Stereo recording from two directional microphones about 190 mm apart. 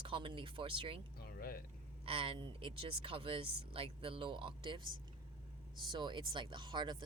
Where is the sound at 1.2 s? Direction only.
55° left (ahead or behind).